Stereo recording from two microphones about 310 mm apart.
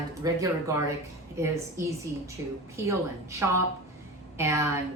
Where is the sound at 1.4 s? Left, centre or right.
Centre.